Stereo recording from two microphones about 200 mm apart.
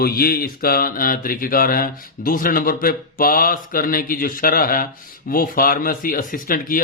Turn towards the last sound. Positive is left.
turn(degrees=45)  # may be behind; listen again after turning